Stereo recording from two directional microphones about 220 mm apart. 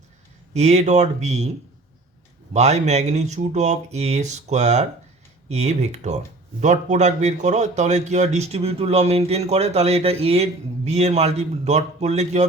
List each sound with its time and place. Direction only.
0.5 s a man's voice: 30° right (ahead or behind)